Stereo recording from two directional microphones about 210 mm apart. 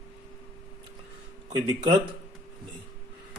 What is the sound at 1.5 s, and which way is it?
Speech, 20° right (ahead or behind).